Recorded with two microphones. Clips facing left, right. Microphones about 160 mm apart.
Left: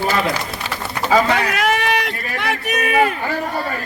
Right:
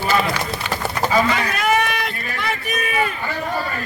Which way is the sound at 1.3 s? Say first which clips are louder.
Left 1 dB; 65° left (ahead or behind).